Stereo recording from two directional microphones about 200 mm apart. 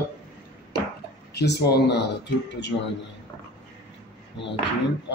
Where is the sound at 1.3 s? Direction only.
55° left (ahead or behind).